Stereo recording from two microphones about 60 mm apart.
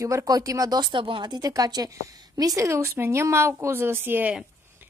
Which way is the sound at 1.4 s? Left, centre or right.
Right.